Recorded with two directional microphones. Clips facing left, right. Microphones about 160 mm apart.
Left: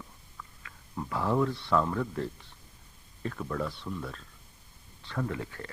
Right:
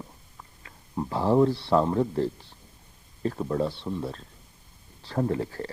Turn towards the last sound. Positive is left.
turn(degrees=-35)  # may be behind; listen again after turning